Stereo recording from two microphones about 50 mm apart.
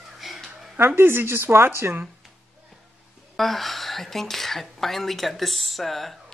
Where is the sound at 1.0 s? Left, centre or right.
Right.